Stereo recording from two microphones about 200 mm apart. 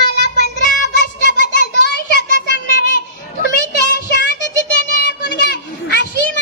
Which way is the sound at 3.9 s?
60° left (ahead or behind).